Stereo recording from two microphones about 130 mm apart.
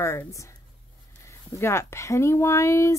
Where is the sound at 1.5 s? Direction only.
20° left (ahead or behind).